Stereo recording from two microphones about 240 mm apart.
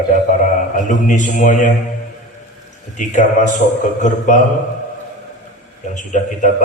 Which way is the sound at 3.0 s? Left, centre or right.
Left.